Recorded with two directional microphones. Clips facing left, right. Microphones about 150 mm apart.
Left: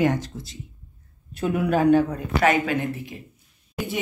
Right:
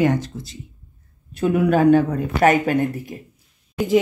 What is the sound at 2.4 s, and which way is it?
Speech, 45° right (ahead or behind).